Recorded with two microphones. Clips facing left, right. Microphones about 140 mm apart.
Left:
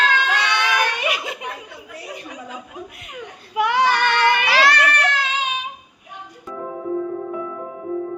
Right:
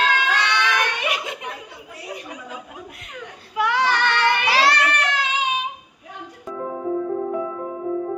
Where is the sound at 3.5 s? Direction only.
15° left (ahead or behind).